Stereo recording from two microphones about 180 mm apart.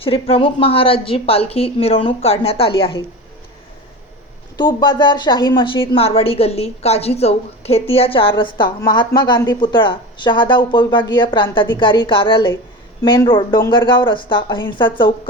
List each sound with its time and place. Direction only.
0.0 s a woman's voice: 30° left (ahead or behind)
4.5 s a woman's voice: 25° left (ahead or behind)